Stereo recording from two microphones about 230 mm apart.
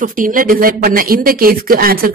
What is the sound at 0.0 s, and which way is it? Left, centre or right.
Speech, right.